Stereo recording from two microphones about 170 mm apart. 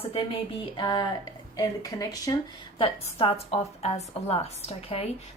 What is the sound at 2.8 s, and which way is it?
Speech, 35° left (ahead or behind).